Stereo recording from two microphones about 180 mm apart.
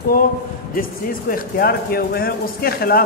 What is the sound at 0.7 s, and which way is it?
A man's voice, 50° left (ahead or behind).